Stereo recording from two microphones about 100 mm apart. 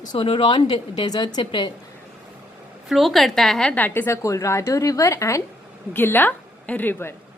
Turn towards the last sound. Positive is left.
turn(degrees=20)  # may be behind; listen again after turning